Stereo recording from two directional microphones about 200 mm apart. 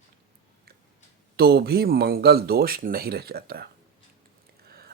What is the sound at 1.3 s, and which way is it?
Speech, 50° right (ahead or behind).